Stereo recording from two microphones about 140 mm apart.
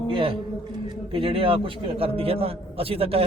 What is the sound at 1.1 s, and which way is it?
A man's voice, 40° right (ahead or behind).